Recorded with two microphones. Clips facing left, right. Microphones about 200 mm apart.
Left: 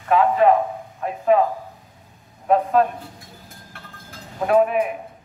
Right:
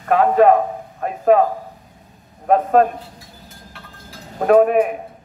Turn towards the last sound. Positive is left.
turn(degrees=-50)  # may be behind; listen again after turning